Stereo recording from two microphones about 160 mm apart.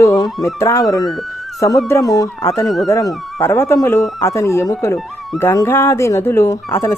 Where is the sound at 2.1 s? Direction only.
20° left (ahead or behind).